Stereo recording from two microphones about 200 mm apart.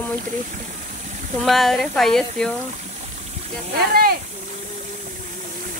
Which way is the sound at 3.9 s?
50° right (ahead or behind).